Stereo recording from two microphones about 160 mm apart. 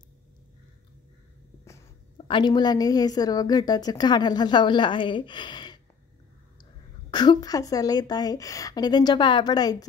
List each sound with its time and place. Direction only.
2.1 s a woman's voice: 30° left (ahead or behind)